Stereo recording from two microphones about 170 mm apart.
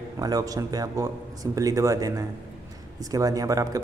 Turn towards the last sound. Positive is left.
turn(degrees=-20)  # may be behind; listen again after turning